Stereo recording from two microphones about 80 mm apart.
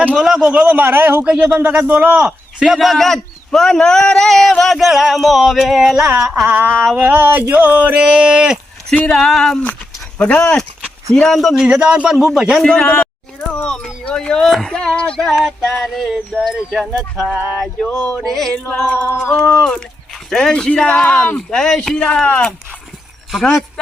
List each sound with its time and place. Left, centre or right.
0.2 s a man's voice: centre; by 1.3 s right
1.3 s a man's voice: centre
6.5 s speech: right
9.0 s speech: centre
11.6 s a man's voice: centre
12.6 s speech: centre
18.5 s speech: centre
18.9 s a sound: centre
19.4 s speech: centre
23.3 s speech: centre